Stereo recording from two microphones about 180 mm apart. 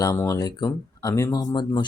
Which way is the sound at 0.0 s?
15° left (ahead or behind).